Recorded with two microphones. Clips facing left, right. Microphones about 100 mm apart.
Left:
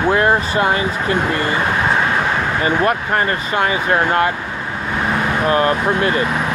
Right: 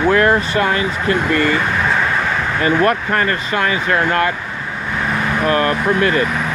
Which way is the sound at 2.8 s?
20° left (ahead or behind).